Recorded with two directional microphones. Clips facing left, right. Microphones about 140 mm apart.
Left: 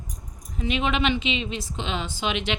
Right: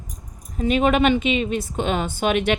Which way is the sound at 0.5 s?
45° right (ahead or behind).